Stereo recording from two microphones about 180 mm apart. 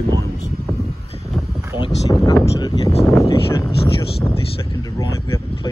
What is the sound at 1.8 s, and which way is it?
Speech, 25° left (ahead or behind).